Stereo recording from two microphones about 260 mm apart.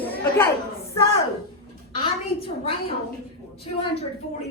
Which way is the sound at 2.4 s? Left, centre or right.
Left.